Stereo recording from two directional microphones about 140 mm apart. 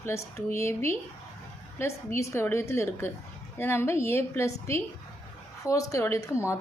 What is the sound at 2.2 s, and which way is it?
A woman's voice, 20° left (ahead or behind).